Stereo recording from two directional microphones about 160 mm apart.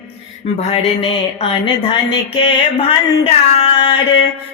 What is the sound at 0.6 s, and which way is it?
Music, 40° left (ahead or behind).